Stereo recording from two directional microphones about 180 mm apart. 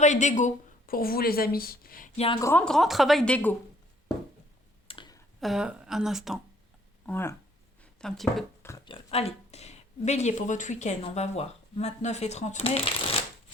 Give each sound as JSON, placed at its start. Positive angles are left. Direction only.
{"t": 0.0, "sound": "a woman's voice", "side_deg": 40}
{"t": 2.1, "sound": "speech", "side_deg": 30}
{"t": 2.4, "sound": "a woman's voice", "side_deg": 10}
{"t": 4.9, "sound": "clicking", "side_deg": 25}
{"t": 5.4, "sound": "a woman's voice", "side_deg": 0}
{"t": 7.0, "sound": "speech", "side_deg": 10}
{"t": 8.0, "sound": "a woman's voice", "side_deg": 0}
{"t": 8.6, "sound": "oink", "side_deg": 15}
{"t": 8.9, "sound": "speech", "side_deg": 35}